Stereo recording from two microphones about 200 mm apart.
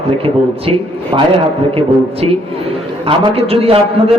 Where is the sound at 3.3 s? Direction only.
30° right (ahead or behind).